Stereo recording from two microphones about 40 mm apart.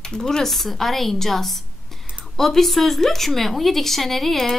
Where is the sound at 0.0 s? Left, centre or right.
Centre.